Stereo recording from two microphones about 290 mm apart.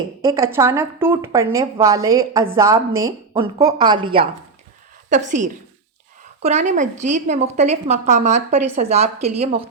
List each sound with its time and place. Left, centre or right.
0.2 s a woman's voice: centre